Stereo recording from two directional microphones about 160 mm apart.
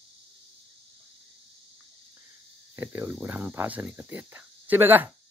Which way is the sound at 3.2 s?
15° right (ahead or behind).